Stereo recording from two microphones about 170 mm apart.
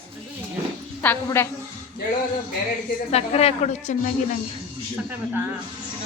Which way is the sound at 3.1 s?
40° left (ahead or behind).